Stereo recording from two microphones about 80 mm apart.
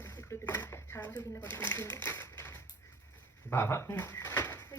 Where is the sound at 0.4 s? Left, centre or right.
Left.